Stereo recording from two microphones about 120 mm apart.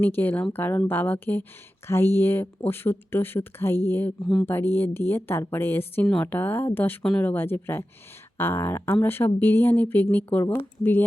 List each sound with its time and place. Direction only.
0.0 s a woman's voice: 15° left (ahead or behind)
4.2 s speech: 5° left (ahead or behind)
4.4 s a woman's voice: 15° left (ahead or behind)